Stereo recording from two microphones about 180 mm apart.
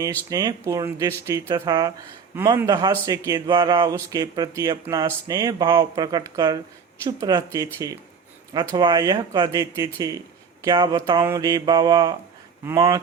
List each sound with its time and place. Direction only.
0.3 s a man's voice: 20° right (ahead or behind)